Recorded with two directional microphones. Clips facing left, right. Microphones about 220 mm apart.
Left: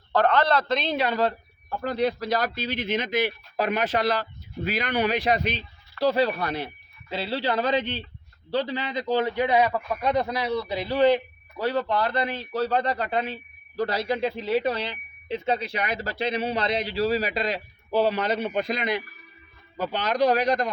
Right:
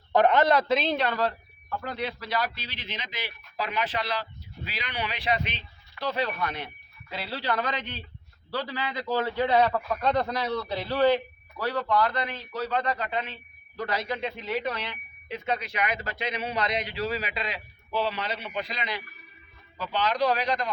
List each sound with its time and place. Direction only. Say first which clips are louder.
0.1 s a man's voice: right 1 dB; 20° right (ahead or behind)
0.7 s speech: even; centre (ahead or behind)
1.8 s a man's voice: left 10 dB; 40° left (ahead or behind)